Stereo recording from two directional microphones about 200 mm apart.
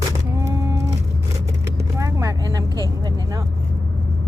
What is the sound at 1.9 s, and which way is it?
Speech, 15° right (ahead or behind).